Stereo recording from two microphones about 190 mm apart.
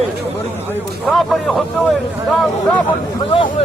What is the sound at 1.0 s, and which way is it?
Speech, centre (ahead or behind).